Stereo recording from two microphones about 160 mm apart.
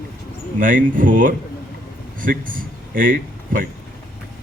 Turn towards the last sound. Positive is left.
turn(degrees=-60)  # may be behind; listen again after turning